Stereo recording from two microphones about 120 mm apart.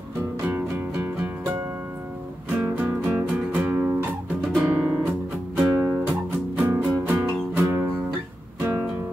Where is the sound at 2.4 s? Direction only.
15° right (ahead or behind).